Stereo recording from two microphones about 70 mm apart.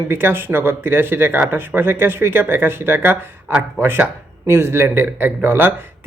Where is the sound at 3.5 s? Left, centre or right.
Centre.